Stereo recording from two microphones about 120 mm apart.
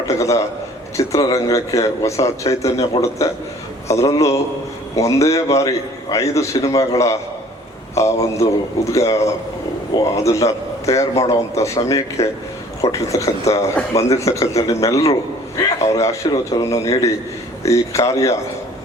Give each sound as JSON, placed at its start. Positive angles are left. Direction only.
{"t": 0.1, "sound": "speech", "side_deg": 25}
{"t": 3.0, "sound": "a man's voice", "side_deg": 45}
{"t": 3.8, "sound": "a man's voice", "side_deg": 25}